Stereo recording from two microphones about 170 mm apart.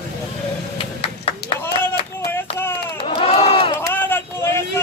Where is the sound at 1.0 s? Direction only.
35° left (ahead or behind).